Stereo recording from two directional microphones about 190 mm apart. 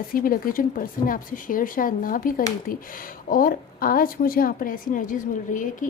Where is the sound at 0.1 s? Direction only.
50° left (ahead or behind).